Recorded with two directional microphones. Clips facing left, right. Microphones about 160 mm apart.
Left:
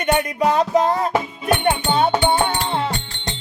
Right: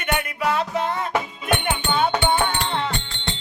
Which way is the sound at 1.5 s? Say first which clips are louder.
Left 6 dB; 35° left (ahead or behind).